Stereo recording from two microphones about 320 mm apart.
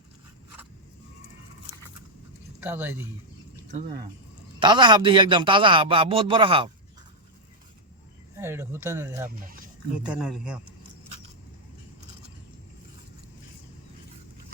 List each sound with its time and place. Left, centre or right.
2.6 s a man's voice: centre
3.7 s a man's voice: right
8.4 s a man's voice: centre